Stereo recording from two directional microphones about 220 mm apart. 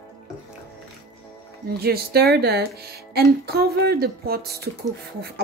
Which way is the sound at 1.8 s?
45° right (ahead or behind).